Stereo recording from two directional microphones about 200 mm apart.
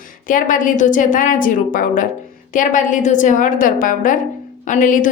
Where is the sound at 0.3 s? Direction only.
40° left (ahead or behind).